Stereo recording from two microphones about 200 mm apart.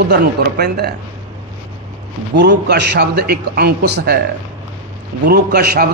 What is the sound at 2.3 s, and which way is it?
A man's voice, 55° right (ahead or behind).